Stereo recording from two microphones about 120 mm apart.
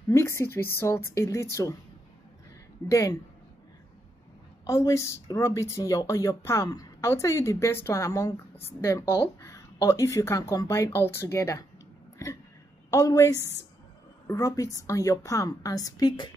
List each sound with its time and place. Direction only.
0.1 s speech: 20° left (ahead or behind)
2.9 s speech: 25° left (ahead or behind)
4.6 s speech: 25° left (ahead or behind)
12.9 s speech: 30° left (ahead or behind)